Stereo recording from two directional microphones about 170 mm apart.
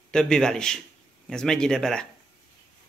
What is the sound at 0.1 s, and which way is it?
Speech, 5° left (ahead or behind).